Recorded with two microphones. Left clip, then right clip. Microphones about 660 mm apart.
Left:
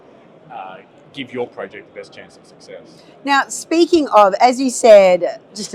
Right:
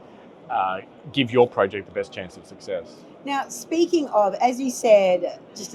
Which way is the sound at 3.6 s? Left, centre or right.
Left.